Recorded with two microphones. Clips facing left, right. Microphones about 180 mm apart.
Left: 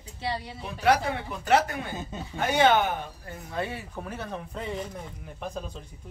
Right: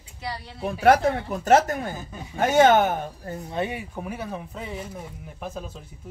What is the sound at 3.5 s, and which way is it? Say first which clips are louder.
A woman's voice: right 3 dB; 20° right (ahead or behind).